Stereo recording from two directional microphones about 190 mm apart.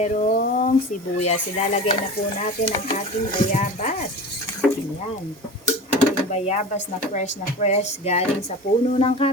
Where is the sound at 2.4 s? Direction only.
35° left (ahead or behind).